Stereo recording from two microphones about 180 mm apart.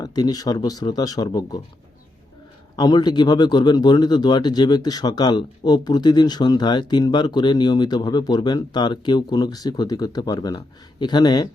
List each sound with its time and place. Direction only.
0.0 s speech: 20° left (ahead or behind)
2.7 s speech: 25° left (ahead or behind)